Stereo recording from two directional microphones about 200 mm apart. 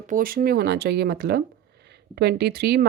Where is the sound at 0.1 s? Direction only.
45° right (ahead or behind).